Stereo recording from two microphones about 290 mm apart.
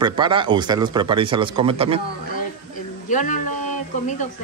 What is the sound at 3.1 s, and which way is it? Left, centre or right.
Speech, left.